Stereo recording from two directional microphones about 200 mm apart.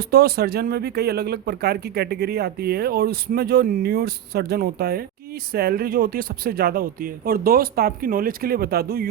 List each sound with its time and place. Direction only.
0.0 s speech: 50° right (ahead or behind)